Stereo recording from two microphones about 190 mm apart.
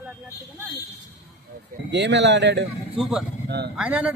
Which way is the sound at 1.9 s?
65° right (ahead or behind).